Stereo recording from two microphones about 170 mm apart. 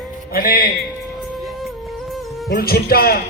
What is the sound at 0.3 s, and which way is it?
Speech, 60° left (ahead or behind).